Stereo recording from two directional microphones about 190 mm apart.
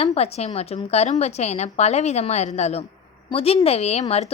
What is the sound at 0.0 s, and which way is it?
A woman's voice, 30° left (ahead or behind).